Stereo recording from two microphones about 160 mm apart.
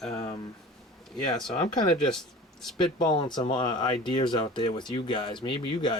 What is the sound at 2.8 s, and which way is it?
Speech, 25° left (ahead or behind).